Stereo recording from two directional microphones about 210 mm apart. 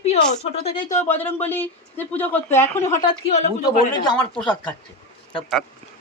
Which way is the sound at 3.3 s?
30° left (ahead or behind).